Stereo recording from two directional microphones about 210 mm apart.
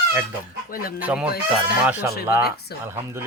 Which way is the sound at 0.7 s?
45° left (ahead or behind).